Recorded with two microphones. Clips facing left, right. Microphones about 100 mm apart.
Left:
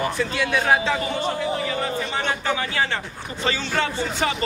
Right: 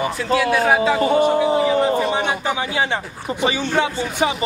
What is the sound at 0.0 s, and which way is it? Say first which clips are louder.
A man's voice: right 5 dB; 5° right (ahead or behind).